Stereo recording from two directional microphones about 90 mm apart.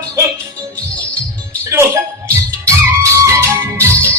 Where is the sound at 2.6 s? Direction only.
35° right (ahead or behind).